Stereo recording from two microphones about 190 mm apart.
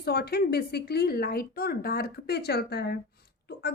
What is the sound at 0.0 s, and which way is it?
Speech, 55° left (ahead or behind).